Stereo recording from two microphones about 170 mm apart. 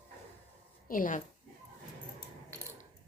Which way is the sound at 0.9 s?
50° left (ahead or behind).